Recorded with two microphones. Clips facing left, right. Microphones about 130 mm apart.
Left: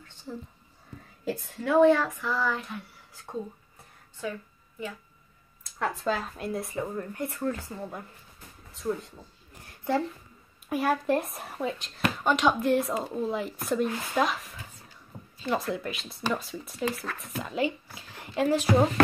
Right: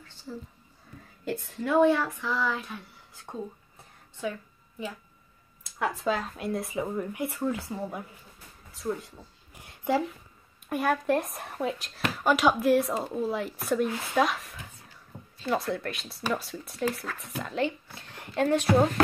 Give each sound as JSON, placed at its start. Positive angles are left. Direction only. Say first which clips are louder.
{"t": 0.3, "sound": "speech", "louder": "left 1 dB", "side_deg": 20}
{"t": 1.2, "sound": "speech", "louder": "even", "side_deg": 0}
{"t": 5.8, "sound": "speech", "louder": "right 1 dB", "side_deg": 0}
{"t": 8.7, "sound": "speech", "louder": "left 1 dB", "side_deg": 0}
{"t": 9.6, "sound": "a sound", "louder": "right 1 dB", "side_deg": -15}
{"t": 10.7, "sound": "speech", "louder": "even", "side_deg": 0}